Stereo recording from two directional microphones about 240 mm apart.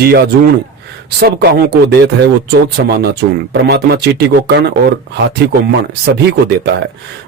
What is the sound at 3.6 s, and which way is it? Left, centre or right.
Speech, right.